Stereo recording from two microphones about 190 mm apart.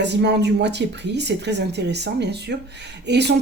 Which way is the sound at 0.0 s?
65° right (ahead or behind).